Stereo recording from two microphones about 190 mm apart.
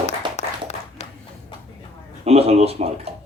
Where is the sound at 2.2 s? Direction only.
35° right (ahead or behind).